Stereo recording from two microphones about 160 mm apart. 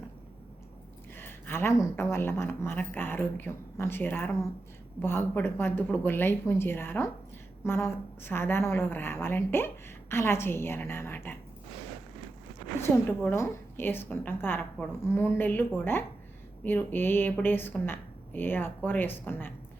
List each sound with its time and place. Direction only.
1.1 s speech: 15° left (ahead or behind)
13.3 s speech: 15° left (ahead or behind)